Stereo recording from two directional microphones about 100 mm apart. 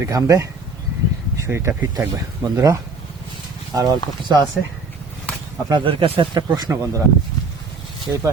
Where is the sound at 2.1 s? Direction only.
40° right (ahead or behind).